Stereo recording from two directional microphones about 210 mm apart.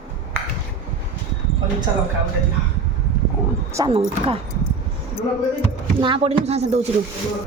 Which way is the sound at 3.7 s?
25° right (ahead or behind).